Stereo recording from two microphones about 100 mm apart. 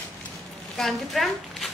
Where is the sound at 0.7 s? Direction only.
Centre (ahead or behind).